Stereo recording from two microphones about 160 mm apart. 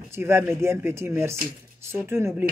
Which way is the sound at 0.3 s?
15° right (ahead or behind).